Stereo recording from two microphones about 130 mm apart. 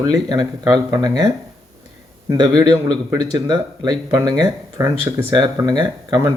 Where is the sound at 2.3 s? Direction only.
30° right (ahead or behind).